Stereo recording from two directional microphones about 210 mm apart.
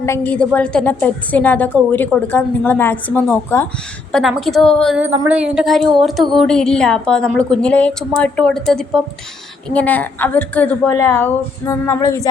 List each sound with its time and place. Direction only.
0.3 s a woman's voice: 5° left (ahead or behind)
4.1 s a woman's voice: centre (ahead or behind); by 12.3 s 15° left (ahead or behind)